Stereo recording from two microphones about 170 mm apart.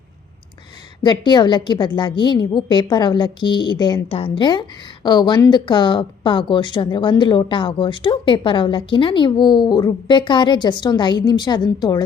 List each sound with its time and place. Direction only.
1.0 s speech: 25° left (ahead or behind)